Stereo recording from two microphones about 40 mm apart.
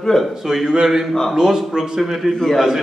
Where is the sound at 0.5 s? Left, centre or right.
Centre.